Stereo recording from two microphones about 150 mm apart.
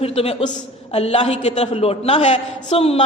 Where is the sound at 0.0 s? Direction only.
40° left (ahead or behind).